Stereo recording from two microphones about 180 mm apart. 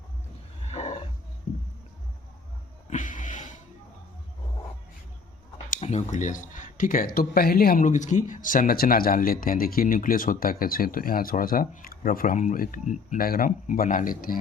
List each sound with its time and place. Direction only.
0.7 s wild animals: 35° left (ahead or behind)
2.9 s music: 45° left (ahead or behind)
5.7 s speech: 35° left (ahead or behind)